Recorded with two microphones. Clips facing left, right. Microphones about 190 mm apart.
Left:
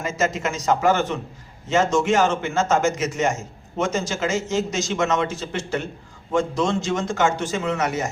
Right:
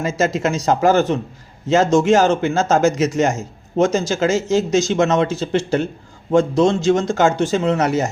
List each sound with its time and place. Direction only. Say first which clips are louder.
0.0 s speech: right 5 dB; 35° right (ahead or behind)